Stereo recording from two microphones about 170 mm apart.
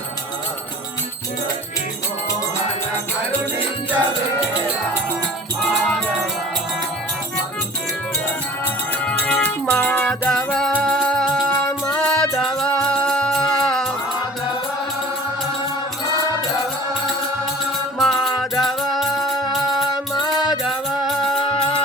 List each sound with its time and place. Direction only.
9.0 s music: 5° left (ahead or behind)
18.0 s music: centre (ahead or behind)
21.4 s music: 30° left (ahead or behind)